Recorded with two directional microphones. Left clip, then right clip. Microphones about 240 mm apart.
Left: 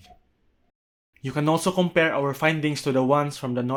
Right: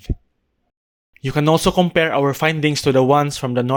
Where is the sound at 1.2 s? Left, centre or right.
Right.